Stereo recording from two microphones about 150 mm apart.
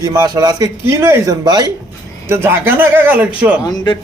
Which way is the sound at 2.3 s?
15° right (ahead or behind).